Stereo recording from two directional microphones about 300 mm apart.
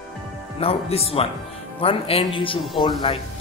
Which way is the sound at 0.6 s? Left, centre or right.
Centre.